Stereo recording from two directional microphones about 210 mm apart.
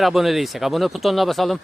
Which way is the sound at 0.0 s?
Centre (ahead or behind).